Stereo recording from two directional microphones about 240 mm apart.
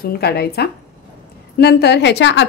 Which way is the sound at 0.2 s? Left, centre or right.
Left.